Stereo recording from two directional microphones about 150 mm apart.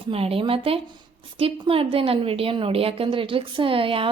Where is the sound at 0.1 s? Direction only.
40° right (ahead or behind).